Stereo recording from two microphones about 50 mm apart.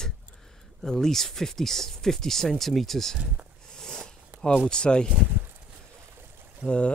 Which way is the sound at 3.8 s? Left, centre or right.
Centre.